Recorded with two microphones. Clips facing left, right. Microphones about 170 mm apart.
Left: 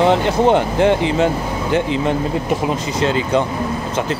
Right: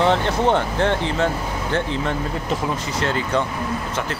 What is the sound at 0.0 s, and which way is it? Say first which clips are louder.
Speech: left 4 dB; 15° left (ahead or behind).